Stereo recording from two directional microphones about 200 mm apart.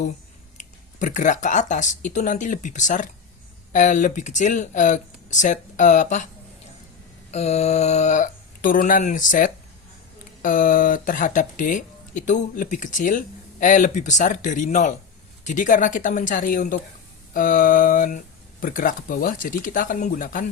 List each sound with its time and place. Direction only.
0.5 s speech: 40° left (ahead or behind)
7.3 s speech: 35° left (ahead or behind)